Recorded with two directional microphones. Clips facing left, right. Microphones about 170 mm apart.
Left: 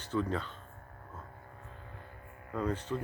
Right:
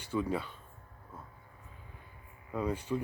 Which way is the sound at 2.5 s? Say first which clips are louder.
Right 1 dB; 10° right (ahead or behind).